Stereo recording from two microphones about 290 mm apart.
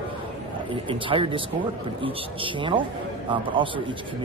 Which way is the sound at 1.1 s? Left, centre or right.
Centre.